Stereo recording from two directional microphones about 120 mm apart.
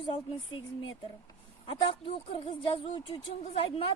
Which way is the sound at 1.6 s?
50° left (ahead or behind).